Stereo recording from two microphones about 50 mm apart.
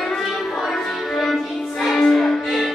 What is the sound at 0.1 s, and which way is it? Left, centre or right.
Music, centre.